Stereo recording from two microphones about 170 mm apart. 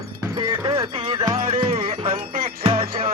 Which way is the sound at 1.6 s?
40° right (ahead or behind).